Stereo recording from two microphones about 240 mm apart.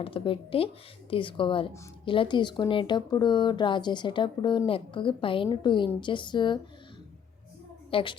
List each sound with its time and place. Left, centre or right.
0.0 s a woman's voice: left
7.9 s a woman's voice: left